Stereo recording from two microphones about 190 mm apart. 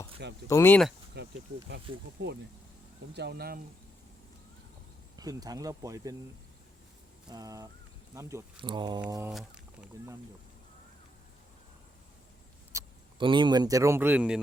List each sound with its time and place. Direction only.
0.4 s speech: 15° left (ahead or behind)
1.2 s speech: 60° right (ahead or behind)
2.2 s speech: 70° right (ahead or behind)
3.2 s speech: 60° right (ahead or behind)
5.1 s speech: 20° right (ahead or behind)
7.3 s speech: 20° right (ahead or behind)
9.3 s speech: centre (ahead or behind)
12.7 s speech: 25° right (ahead or behind); by 14.4 s 5° right (ahead or behind)